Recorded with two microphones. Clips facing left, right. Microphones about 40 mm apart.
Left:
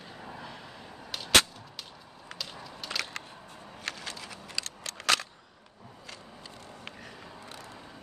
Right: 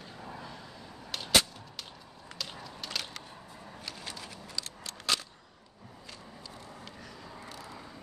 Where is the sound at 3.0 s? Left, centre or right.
Left.